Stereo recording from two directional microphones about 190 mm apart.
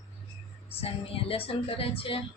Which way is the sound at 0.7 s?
30° left (ahead or behind).